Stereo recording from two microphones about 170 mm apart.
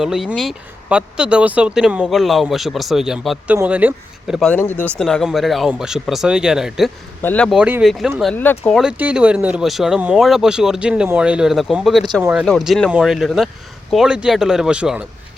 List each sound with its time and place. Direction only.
0.0 s speech: 5° right (ahead or behind)
4.4 s speech: 10° left (ahead or behind)
7.2 s speech: 10° left (ahead or behind)
7.6 s speech: 5° right (ahead or behind)